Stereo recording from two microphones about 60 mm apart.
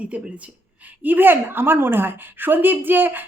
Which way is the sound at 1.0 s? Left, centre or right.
Right.